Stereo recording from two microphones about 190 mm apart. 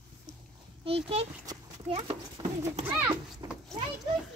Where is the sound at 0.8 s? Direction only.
30° right (ahead or behind).